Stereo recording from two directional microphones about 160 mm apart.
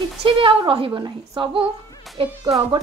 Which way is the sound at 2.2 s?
35° right (ahead or behind).